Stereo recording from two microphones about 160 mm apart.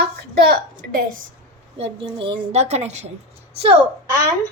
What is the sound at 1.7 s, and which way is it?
A woman's voice, 35° right (ahead or behind).